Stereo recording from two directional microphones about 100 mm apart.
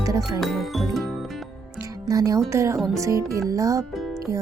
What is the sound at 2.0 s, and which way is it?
Speech, 35° right (ahead or behind).